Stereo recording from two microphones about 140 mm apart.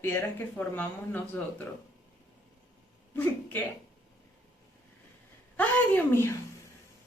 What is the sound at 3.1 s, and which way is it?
Speech, 15° left (ahead or behind).